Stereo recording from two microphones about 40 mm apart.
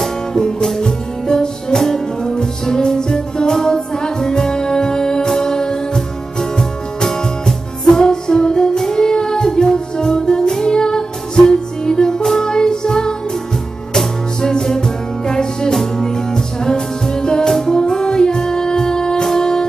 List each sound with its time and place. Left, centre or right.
0.0 s music: centre